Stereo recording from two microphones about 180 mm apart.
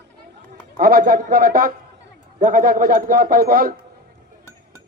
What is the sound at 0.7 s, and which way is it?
A man's voice, 55° right (ahead or behind).